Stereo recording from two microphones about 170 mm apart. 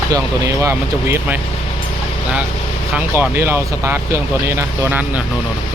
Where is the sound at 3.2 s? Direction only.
15° right (ahead or behind).